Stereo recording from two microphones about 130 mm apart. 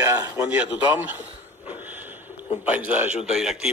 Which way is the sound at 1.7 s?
15° right (ahead or behind).